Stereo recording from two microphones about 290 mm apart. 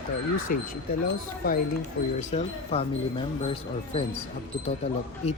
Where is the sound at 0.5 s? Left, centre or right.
Left.